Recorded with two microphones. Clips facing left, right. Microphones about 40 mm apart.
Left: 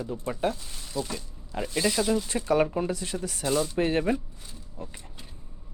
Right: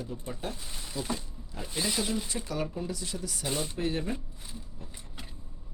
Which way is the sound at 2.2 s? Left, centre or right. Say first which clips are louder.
Left 10 dB; left.